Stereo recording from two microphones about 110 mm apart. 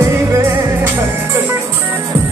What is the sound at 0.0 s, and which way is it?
Music, 25° right (ahead or behind).